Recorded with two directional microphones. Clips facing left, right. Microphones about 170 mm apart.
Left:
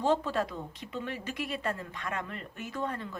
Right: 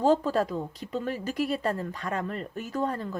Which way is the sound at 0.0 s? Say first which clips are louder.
Right 5 dB; 40° right (ahead or behind).